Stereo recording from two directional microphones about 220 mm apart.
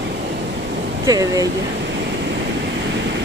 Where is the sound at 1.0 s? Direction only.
15° right (ahead or behind).